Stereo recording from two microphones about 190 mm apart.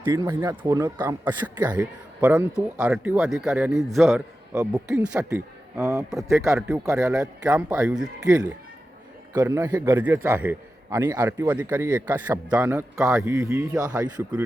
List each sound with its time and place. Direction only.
0.0 s a man's voice: 15° right (ahead or behind)
9.3 s a man's voice: 20° right (ahead or behind)